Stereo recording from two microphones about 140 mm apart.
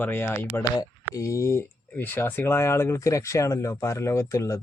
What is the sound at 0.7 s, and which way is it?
Speech, 25° left (ahead or behind).